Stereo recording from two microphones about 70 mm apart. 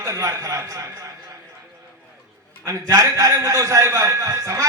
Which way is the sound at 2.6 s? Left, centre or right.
Right.